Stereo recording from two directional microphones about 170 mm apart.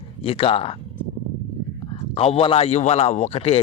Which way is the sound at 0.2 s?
35° left (ahead or behind).